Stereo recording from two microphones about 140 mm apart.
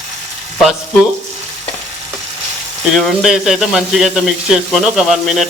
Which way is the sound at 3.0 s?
Centre (ahead or behind).